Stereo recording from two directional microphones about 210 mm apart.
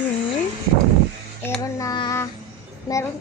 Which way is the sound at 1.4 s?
15° left (ahead or behind).